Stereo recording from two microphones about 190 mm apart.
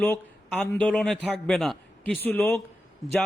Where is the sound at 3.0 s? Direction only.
Centre (ahead or behind).